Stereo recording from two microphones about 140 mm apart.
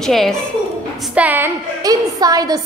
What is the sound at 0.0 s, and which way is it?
Speech, 5° left (ahead or behind).